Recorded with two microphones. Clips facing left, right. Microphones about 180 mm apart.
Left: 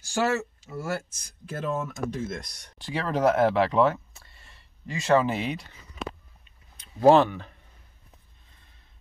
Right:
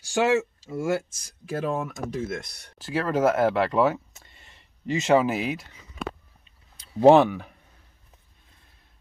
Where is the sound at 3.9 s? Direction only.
20° right (ahead or behind).